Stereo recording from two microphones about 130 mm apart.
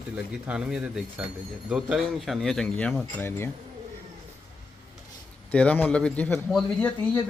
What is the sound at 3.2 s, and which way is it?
Speech, 20° left (ahead or behind).